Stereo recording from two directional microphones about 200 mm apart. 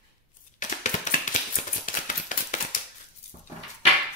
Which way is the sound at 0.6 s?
40° left (ahead or behind).